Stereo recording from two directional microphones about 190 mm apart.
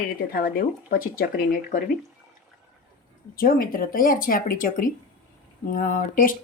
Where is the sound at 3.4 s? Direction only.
50° left (ahead or behind).